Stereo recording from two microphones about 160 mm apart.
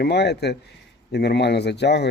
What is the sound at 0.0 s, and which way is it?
Speech, 90° left.